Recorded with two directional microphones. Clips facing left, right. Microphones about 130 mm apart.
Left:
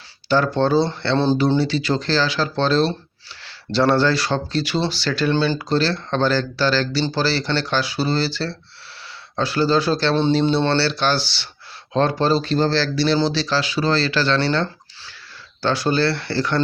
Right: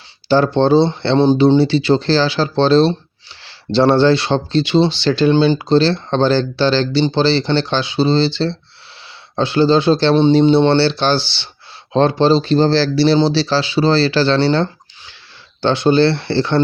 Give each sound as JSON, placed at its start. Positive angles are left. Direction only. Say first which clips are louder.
{"t": 0.3, "sound": "speech", "louder": "right 5 dB", "side_deg": -30}